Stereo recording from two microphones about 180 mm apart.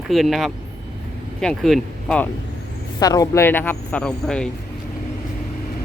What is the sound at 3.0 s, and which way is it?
Speech, 20° left (ahead or behind).